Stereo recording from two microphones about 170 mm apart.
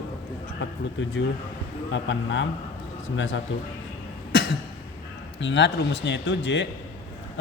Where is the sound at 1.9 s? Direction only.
90° left.